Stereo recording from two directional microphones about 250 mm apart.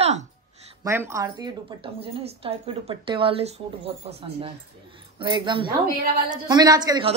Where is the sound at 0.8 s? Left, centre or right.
Centre.